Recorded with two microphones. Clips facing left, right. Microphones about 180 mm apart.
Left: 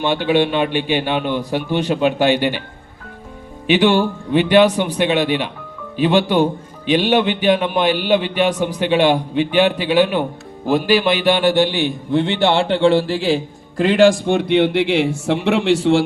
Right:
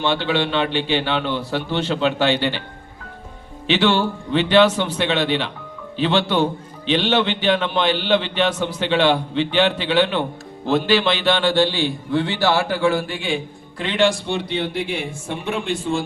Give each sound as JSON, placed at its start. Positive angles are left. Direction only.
{"t": 0.0, "sound": "a man's voice", "side_deg": 15}
{"t": 3.7, "sound": "a man's voice", "side_deg": 15}
{"t": 14.3, "sound": "speech", "side_deg": 55}